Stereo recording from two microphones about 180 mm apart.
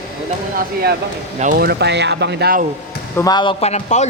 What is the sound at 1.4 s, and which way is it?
Speech, 50° right (ahead or behind).